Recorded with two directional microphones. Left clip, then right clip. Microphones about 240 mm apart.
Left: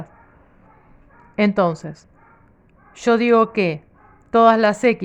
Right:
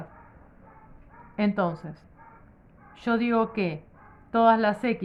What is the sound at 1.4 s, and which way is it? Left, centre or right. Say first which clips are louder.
A woman's voice: left 9 dB; left.